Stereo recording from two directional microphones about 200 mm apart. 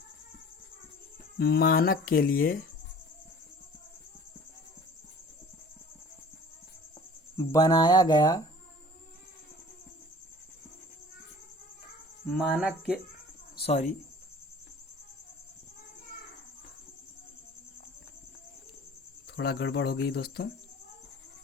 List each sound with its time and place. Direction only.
1.4 s speech: 50° left (ahead or behind)
7.5 s mantra: 20° left (ahead or behind)
12.3 s speech: centre (ahead or behind)
13.7 s speech: 35° left (ahead or behind)
19.4 s speech: 50° left (ahead or behind)